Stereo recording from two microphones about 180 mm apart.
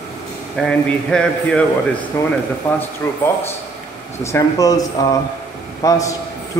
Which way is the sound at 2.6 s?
10° left (ahead or behind).